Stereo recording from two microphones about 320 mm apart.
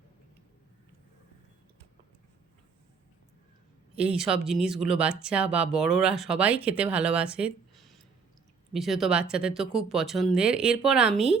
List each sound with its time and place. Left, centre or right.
3.9 s speech: centre